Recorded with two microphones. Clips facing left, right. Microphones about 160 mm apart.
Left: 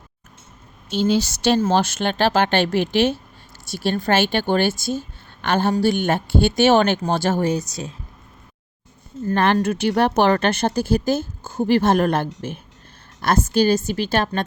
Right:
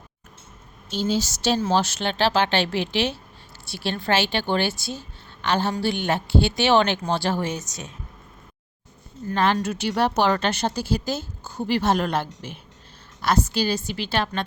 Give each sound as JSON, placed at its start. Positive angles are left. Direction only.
{"t": 0.9, "sound": "a woman's voice", "side_deg": 65}
{"t": 9.2, "sound": "speech", "side_deg": 55}